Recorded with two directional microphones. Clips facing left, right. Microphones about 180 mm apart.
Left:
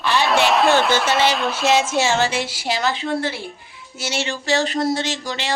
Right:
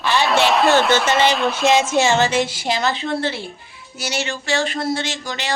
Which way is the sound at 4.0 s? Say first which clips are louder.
Even; 30° left (ahead or behind).